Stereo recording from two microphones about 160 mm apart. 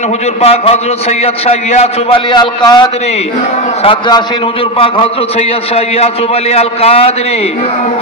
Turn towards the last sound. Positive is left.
turn(degrees=40)  # may be behind; listen again after turning